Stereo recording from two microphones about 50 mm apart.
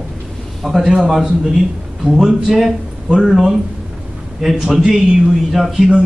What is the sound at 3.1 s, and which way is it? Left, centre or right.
A man's voice, centre.